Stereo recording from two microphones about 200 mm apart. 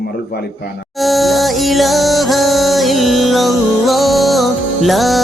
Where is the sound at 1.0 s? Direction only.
Centre (ahead or behind).